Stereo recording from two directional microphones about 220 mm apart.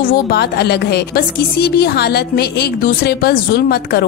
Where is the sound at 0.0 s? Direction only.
45° left (ahead or behind).